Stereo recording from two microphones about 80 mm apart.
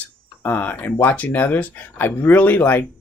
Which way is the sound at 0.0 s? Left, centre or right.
Left.